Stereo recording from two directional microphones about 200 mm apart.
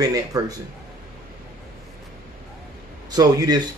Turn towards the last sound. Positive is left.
turn(degrees=-20)  # may be behind; listen again after turning